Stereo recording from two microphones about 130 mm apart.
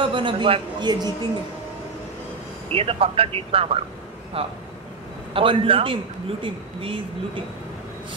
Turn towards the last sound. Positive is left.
turn(degrees=-40)  # may be behind; listen again after turning